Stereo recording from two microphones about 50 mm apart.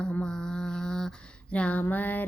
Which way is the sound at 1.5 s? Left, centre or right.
Left.